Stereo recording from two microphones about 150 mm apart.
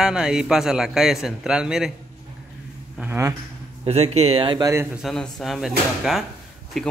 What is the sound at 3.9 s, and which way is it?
Speech, 45° right (ahead or behind).